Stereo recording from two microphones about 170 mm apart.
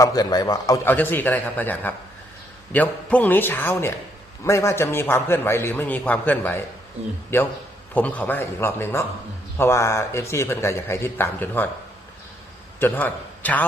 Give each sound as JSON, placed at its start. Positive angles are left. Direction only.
{"t": 0.0, "sound": "a man's voice", "side_deg": 20}
{"t": 0.9, "sound": "speech", "side_deg": 10}
{"t": 12.8, "sound": "a man's voice", "side_deg": 10}